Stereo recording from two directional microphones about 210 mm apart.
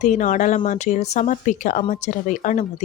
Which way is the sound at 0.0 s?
35° left (ahead or behind).